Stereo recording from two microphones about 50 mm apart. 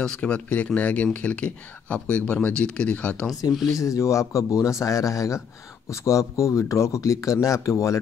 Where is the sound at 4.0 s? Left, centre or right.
Left.